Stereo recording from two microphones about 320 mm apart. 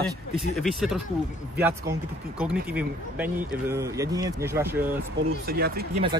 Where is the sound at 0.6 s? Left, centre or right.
Centre.